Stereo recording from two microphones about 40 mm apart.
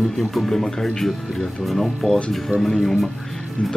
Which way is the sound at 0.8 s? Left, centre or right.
Centre.